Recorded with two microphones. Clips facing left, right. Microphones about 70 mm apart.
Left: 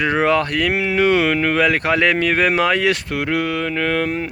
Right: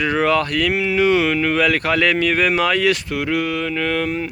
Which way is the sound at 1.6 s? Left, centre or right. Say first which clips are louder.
Left 1 dB; left.